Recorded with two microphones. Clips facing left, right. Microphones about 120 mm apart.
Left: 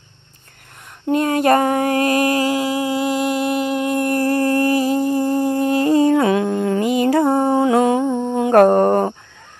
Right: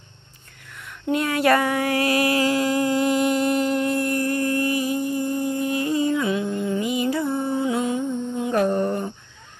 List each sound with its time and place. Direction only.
1.0 s female singing: 35° left (ahead or behind)
2.4 s a sound: 10° left (ahead or behind)
4.4 s music: 75° left (ahead or behind)
4.8 s a sound: 90° left
5.7 s music: 40° left (ahead or behind)
6.0 s mantra: 75° left (ahead or behind); by 9.1 s 90° left